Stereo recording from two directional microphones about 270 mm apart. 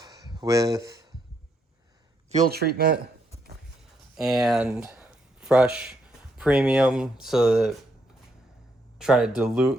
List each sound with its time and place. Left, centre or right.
0.0 s a sound: centre
2.3 s speech: right
4.2 s speech: centre
9.0 s speech: centre